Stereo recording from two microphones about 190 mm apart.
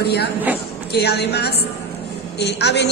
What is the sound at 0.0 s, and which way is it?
A woman's voice, 60° left (ahead or behind).